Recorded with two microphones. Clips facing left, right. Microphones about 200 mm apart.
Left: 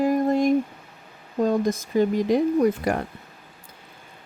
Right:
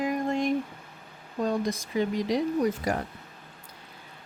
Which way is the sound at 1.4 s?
45° left (ahead or behind).